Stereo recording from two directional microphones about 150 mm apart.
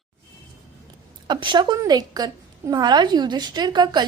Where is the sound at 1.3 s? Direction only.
30° right (ahead or behind).